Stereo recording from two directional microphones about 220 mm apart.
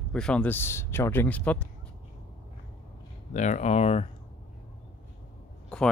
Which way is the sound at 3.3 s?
35° left (ahead or behind).